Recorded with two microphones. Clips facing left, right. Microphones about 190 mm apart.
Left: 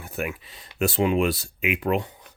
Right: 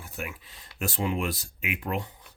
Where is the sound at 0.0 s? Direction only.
60° left (ahead or behind).